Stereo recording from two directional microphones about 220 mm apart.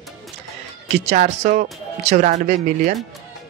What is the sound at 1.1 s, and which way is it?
Speech, 35° right (ahead or behind).